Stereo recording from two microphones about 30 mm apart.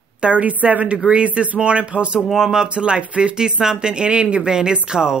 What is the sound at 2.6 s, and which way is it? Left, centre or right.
Speech, right.